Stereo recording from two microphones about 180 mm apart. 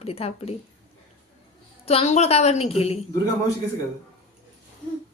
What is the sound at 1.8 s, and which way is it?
A woman's voice, 35° left (ahead or behind).